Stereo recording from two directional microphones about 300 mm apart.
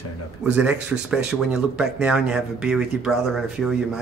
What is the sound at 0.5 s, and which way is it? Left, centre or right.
Speech, centre.